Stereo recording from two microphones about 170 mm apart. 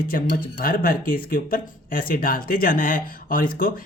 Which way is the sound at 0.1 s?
55° left (ahead or behind).